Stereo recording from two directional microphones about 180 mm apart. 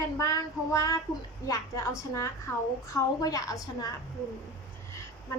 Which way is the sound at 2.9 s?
20° left (ahead or behind).